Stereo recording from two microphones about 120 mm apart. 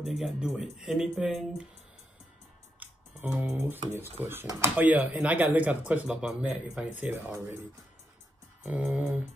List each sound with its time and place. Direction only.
0.0 s speech: 5° right (ahead or behind)
2.8 s music: 10° right (ahead or behind)
4.2 s speech: 20° right (ahead or behind)
8.6 s speech: 10° right (ahead or behind)